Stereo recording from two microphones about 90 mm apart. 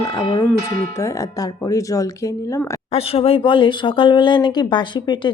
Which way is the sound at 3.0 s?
90° left.